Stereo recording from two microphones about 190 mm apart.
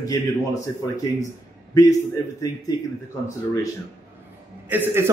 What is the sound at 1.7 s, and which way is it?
Speech, 20° left (ahead or behind).